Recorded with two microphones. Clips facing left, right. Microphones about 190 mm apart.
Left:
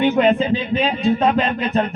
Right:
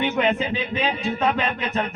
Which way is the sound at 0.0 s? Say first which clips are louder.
Left 6 dB; 35° left (ahead or behind).